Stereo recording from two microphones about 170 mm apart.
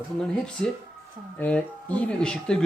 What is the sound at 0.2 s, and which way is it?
Speech, 5° left (ahead or behind).